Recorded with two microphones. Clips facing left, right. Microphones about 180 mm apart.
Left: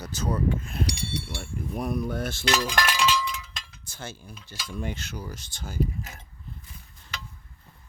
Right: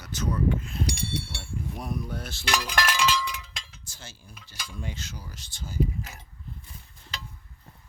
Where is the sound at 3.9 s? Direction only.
55° left (ahead or behind).